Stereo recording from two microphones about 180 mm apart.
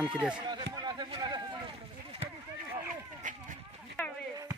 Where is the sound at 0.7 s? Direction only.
25° right (ahead or behind).